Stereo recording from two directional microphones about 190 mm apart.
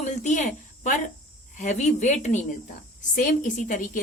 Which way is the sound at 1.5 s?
40° left (ahead or behind).